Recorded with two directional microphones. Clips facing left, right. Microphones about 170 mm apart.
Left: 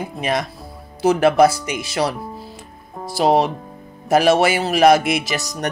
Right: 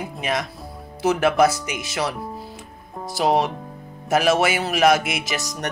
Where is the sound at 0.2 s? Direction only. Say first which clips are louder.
Left 4 dB; 35° left (ahead or behind).